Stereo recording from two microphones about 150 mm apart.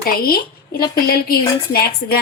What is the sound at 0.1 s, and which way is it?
Speech, 80° left.